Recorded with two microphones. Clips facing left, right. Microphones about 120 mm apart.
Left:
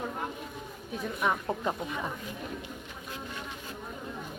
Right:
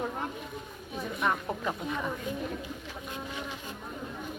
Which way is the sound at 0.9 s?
Centre (ahead or behind).